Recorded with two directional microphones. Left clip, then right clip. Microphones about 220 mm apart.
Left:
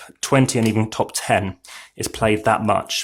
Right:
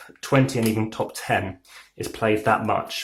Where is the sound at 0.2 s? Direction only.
45° left (ahead or behind).